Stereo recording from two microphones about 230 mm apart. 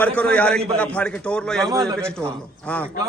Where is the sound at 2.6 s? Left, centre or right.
Centre.